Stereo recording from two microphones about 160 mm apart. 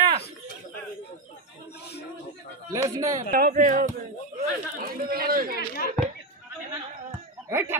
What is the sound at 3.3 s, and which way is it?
Speech, 60° right (ahead or behind).